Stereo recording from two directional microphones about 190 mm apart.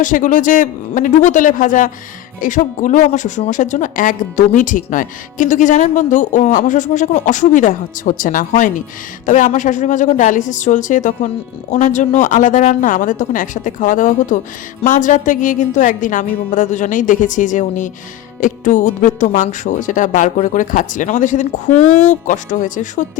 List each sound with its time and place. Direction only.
0.0 s speech: 45° left (ahead or behind)